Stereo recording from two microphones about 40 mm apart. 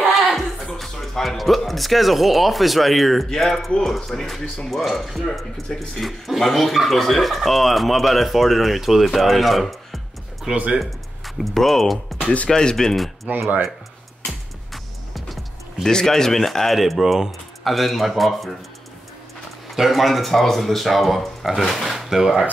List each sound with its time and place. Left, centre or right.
0.0 s music: centre
0.7 s speech: centre
10.5 s speech: right
10.8 s speech: centre
12.4 s speech: centre
12.9 s speech: centre
14.2 s music: centre
15.8 s speech: centre
19.7 s speech: centre